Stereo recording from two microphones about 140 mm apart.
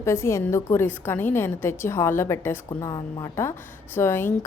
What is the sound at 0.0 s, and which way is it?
A woman's voice, 20° left (ahead or behind).